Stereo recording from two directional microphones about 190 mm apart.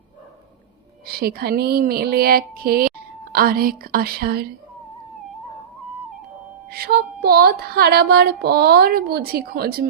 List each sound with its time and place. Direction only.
1.2 s speech: 55° right (ahead or behind)
6.7 s music: 55° right (ahead or behind)